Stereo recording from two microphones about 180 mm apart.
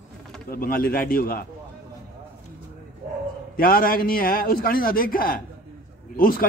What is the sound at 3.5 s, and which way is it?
A man's voice, 55° left (ahead or behind).